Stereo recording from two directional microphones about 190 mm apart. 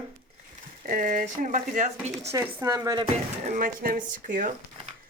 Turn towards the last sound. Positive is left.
turn(degrees=-45)  # may be behind; listen again after turning